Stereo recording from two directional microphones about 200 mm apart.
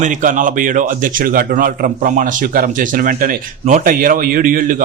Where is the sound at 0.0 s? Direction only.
40° right (ahead or behind).